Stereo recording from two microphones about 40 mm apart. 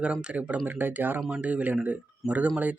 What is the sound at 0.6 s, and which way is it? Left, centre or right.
Speech, right.